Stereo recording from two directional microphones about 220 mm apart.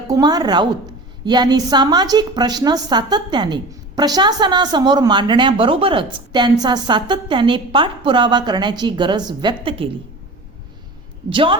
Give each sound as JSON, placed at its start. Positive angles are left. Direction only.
{"t": 0.1, "sound": "a woman's voice", "side_deg": -15}
{"t": 11.3, "sound": "a woman's voice", "side_deg": -20}